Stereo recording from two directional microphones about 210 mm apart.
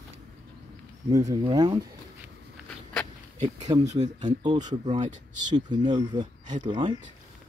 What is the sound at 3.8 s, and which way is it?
Speech, 35° right (ahead or behind).